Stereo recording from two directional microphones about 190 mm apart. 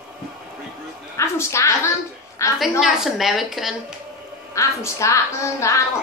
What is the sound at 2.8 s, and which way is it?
Speech, centre (ahead or behind).